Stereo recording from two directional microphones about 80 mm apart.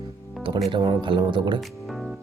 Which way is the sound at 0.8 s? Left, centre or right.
Right.